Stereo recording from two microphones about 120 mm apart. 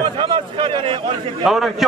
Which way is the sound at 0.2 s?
45° right (ahead or behind).